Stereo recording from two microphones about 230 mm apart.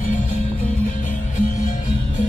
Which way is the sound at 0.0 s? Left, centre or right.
Left.